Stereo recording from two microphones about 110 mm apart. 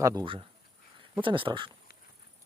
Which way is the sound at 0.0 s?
30° right (ahead or behind).